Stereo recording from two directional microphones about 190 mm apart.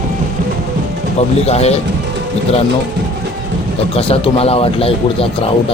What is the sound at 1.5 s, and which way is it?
Speech, 35° left (ahead or behind).